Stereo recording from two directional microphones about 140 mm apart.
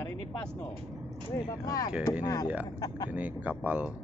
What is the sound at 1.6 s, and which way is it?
Speech, 25° left (ahead or behind).